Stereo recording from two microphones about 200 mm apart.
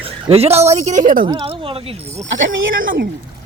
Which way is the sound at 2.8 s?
50° right (ahead or behind).